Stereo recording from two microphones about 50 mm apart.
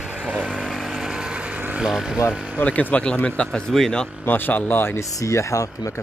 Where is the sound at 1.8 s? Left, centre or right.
Centre.